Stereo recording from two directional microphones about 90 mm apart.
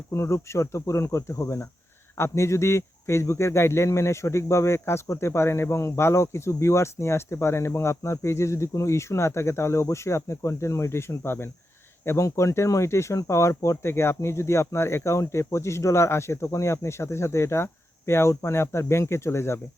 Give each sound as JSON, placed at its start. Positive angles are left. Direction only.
{"t": 0.1, "sound": "speech", "side_deg": 30}